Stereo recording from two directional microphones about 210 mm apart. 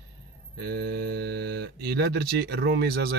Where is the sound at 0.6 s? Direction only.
50° right (ahead or behind).